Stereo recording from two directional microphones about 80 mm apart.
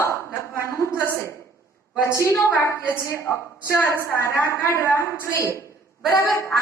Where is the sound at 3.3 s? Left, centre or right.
Left.